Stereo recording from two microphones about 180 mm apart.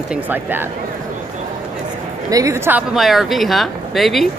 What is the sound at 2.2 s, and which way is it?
Speech, 20° right (ahead or behind).